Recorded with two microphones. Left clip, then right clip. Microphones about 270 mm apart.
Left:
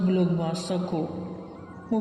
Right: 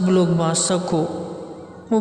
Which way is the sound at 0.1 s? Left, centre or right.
Right.